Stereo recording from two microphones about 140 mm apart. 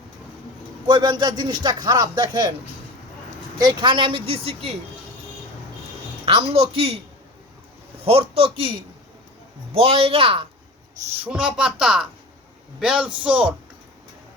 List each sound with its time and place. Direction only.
0.9 s speech: 30° right (ahead or behind)
3.6 s speech: 35° right (ahead or behind)
6.2 s a woman's voice: 40° right (ahead or behind)
8.0 s a woman's voice: 45° right (ahead or behind)
9.7 s a woman's voice: 45° right (ahead or behind)
11.2 s speech: 5° right (ahead or behind)